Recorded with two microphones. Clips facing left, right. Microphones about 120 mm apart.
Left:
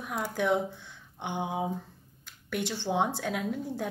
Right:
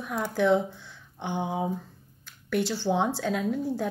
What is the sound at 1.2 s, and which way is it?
A woman's voice, 15° left (ahead or behind).